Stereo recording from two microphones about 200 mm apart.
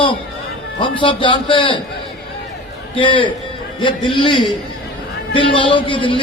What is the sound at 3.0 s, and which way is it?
A man's voice, 25° left (ahead or behind).